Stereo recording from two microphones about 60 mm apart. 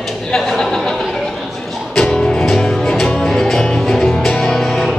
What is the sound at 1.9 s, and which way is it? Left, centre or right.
Music, centre.